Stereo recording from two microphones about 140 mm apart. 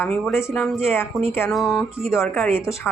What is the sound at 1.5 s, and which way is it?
Speech, centre (ahead or behind).